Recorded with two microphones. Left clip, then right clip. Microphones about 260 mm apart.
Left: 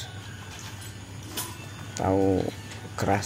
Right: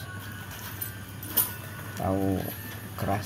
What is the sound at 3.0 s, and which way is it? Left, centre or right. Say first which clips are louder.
Speech: left 5 dB; left.